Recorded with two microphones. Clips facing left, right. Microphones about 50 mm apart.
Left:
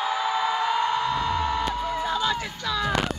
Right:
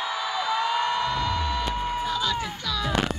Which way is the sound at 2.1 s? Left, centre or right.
Left.